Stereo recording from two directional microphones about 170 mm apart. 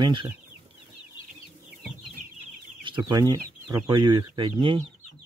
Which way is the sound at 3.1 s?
20° right (ahead or behind).